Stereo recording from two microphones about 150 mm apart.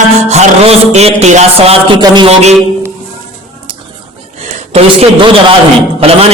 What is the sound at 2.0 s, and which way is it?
Speech, 30° right (ahead or behind).